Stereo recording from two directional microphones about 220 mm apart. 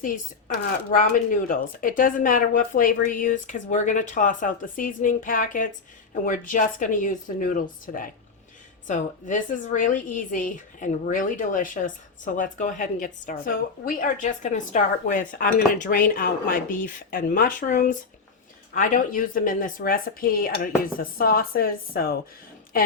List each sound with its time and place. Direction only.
0.9 s a woman's voice: 40° left (ahead or behind)